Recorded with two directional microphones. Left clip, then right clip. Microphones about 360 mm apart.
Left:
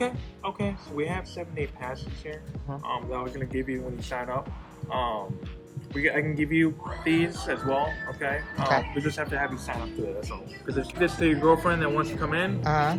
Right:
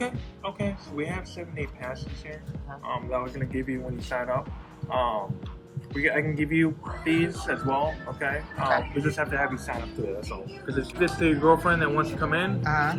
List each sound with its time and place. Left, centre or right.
0.6 s speech: centre
7.0 s speech: left
7.3 s speech: centre
12.6 s speech: centre